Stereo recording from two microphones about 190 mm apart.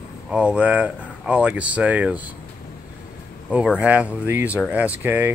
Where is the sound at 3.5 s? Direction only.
5° right (ahead or behind).